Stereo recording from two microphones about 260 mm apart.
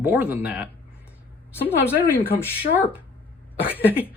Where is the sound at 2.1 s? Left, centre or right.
Centre.